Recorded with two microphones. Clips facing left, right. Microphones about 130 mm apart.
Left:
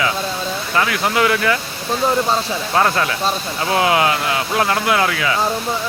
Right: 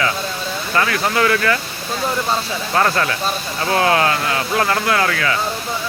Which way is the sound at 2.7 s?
10° left (ahead or behind).